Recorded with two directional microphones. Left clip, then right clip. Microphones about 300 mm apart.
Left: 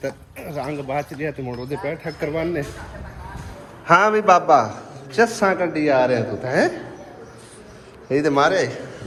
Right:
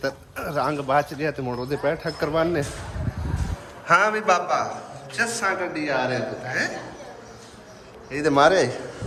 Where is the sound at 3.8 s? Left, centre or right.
Centre.